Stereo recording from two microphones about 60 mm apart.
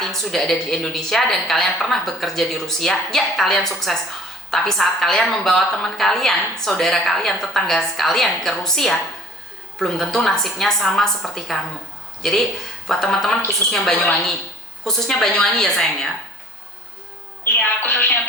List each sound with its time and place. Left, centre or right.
0.0 s a woman's voice: centre
17.6 s speech: left